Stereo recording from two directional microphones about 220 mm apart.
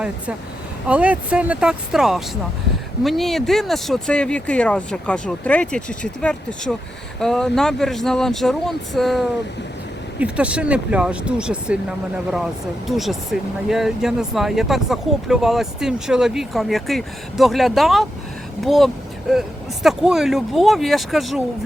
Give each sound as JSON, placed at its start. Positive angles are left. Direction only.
{"t": 0.9, "sound": "speech", "side_deg": -5}